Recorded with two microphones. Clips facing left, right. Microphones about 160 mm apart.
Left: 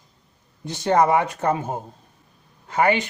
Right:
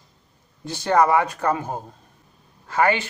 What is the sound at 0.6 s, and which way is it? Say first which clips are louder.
Speech: even; 20° left (ahead or behind).